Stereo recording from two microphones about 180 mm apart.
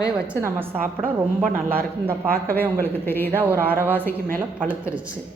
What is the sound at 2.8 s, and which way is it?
Speech, 10° left (ahead or behind).